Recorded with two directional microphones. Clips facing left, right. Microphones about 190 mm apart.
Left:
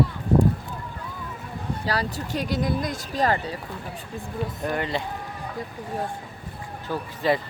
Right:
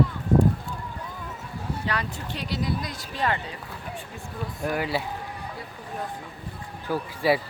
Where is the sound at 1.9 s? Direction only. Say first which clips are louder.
Left 7 dB; 35° left (ahead or behind).